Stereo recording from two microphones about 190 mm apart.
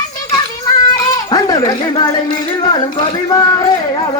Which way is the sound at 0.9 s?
20° left (ahead or behind).